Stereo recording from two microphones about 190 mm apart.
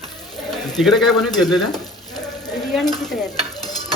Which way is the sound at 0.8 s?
Centre (ahead or behind).